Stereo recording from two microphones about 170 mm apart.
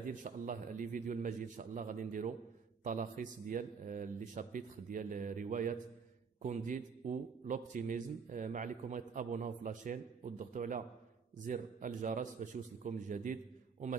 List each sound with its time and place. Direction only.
0.1 s a man's voice: 50° right (ahead or behind)